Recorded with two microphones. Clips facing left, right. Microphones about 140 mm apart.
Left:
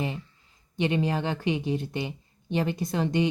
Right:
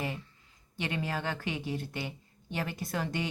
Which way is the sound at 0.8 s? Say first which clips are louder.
Left 8 dB; 20° left (ahead or behind).